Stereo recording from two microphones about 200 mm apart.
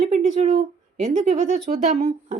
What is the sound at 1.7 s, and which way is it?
Speech, 40° right (ahead or behind).